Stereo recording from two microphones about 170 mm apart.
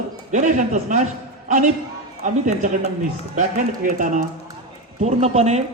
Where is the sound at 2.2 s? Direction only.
45° right (ahead or behind).